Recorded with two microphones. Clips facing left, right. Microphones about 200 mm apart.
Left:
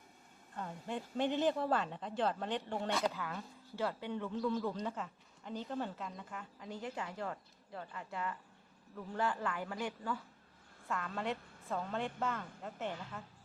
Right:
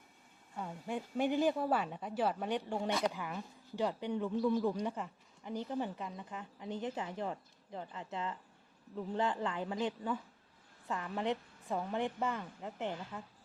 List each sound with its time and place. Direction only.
0.5 s a woman's voice: 10° right (ahead or behind)